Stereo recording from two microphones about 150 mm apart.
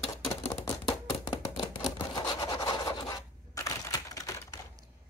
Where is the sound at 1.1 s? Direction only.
30° left (ahead or behind).